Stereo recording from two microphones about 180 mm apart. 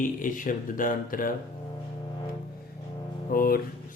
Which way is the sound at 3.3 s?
55° left (ahead or behind).